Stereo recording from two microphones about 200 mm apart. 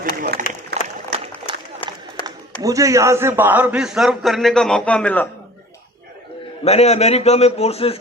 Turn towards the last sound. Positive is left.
turn(degrees=30)  # may be behind; listen again after turning